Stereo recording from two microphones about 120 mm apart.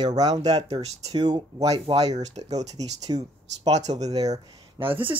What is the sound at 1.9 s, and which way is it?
Speech, 45° right (ahead or behind).